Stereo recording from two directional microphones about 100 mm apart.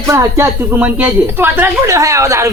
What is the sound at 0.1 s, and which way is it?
Speech, 30° right (ahead or behind).